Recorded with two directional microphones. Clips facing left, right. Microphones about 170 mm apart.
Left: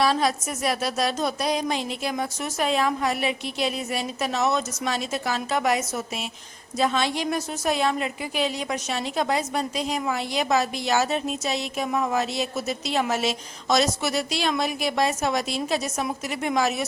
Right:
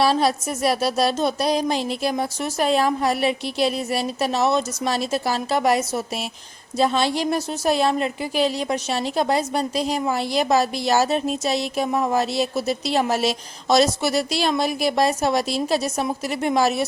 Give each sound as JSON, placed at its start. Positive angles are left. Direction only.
{"t": 0.0, "sound": "a woman's voice", "side_deg": -30}